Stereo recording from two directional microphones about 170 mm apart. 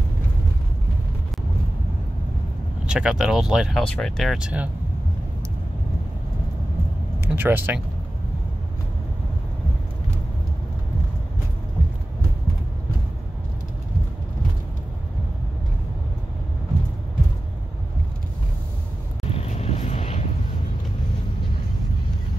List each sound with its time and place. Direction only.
2.9 s speech: 5° right (ahead or behind)
7.2 s speech: 10° right (ahead or behind)
19.2 s vehicle: 35° left (ahead or behind)